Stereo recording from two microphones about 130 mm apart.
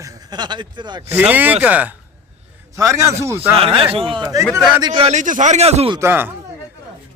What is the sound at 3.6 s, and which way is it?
Speech, 45° right (ahead or behind).